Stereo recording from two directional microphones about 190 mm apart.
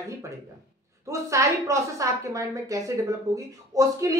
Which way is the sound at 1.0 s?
15° right (ahead or behind).